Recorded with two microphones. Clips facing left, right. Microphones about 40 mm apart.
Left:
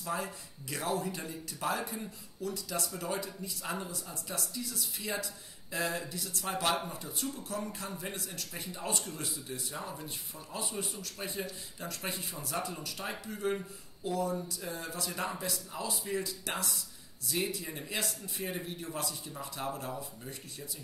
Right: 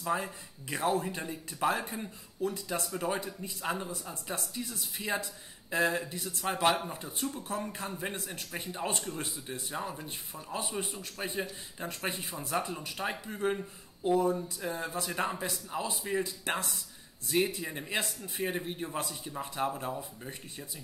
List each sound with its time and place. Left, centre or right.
0.0 s speech: right
3.9 s speech: right